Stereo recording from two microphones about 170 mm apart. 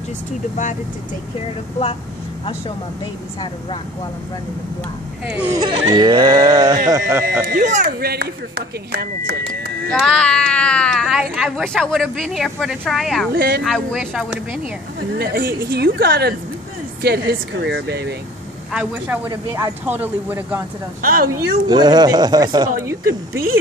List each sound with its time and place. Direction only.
5.2 s speech: 5° right (ahead or behind)
5.5 s a woman's voice: 25° right (ahead or behind)
6.9 s speech: 15° right (ahead or behind)
7.4 s speech: 50° right (ahead or behind)
8.0 s speech: 65° right (ahead or behind)
10.0 s speech: 5° left (ahead or behind)
13.3 s speech: 65° right (ahead or behind)
13.7 s speech: centre (ahead or behind)
15.0 s speech: 60° right (ahead or behind)
18.7 s speech: 5° right (ahead or behind)
19.2 s speech: 20° right (ahead or behind)
21.3 s a woman's voice: 25° right (ahead or behind)